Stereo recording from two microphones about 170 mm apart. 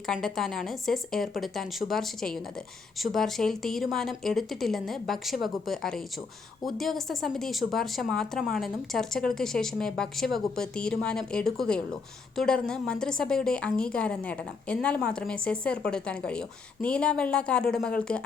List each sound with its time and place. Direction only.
0.1 s a woman's voice: centre (ahead or behind)